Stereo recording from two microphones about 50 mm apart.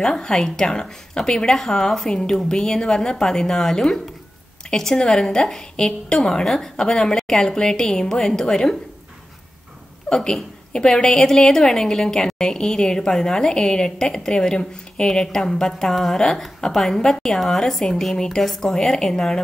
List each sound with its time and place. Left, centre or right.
0.0 s a woman's voice: centre
10.0 s a woman's voice: centre